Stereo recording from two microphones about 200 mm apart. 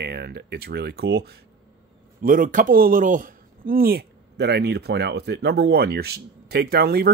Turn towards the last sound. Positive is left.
turn(degrees=-50)  # may be behind; listen again after turning